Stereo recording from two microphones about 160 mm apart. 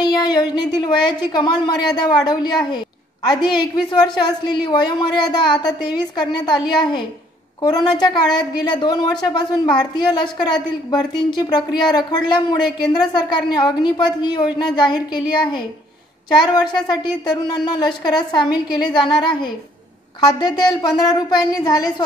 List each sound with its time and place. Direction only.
0.0 s a woman's voice: 25° left (ahead or behind)